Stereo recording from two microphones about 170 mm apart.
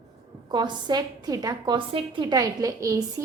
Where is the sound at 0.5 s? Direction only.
25° right (ahead or behind).